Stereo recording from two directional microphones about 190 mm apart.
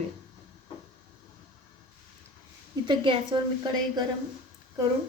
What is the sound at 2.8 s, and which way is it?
A woman's voice, 25° right (ahead or behind).